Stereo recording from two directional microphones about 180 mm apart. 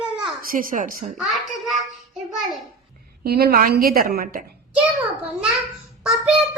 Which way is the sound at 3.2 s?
60° right (ahead or behind).